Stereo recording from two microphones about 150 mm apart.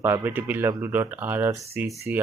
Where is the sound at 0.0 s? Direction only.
15° right (ahead or behind).